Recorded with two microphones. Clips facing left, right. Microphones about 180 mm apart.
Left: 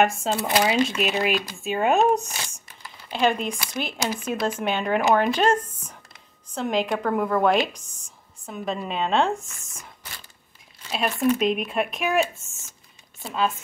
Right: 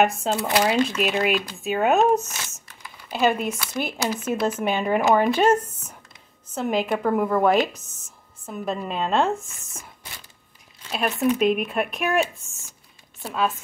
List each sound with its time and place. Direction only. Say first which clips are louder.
0.0 s speech: right 1 dB; centre (ahead or behind)
2.2 s speech: left 1 dB; 30° left (ahead or behind)
3.1 s speech: right 1 dB; 5° right (ahead or behind)
4.0 s speech: even; 10° left (ahead or behind)
4.3 s speech: right 2 dB; 5° right (ahead or behind)
10.9 s speech: even; centre (ahead or behind)